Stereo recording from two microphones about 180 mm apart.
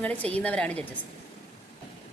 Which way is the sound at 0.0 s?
10° left (ahead or behind).